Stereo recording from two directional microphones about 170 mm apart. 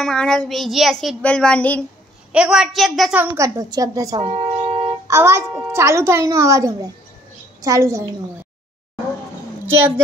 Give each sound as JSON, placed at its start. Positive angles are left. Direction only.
{"t": 0.0, "sound": "child singing", "side_deg": 5}
{"t": 1.0, "sound": "a woman's voice", "side_deg": 5}
{"t": 2.3, "sound": "child singing", "side_deg": -5}
{"t": 3.3, "sound": "a woman's voice", "side_deg": -20}
{"t": 4.2, "sound": "a sound", "side_deg": -30}
{"t": 5.0, "sound": "a child's voice", "side_deg": -15}